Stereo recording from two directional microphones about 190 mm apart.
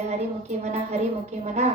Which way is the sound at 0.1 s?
35° right (ahead or behind).